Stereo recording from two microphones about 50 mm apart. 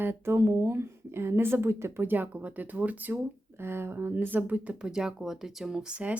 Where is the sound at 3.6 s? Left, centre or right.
Right.